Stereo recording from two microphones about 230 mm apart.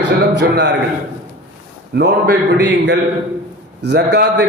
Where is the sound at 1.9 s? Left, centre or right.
Right.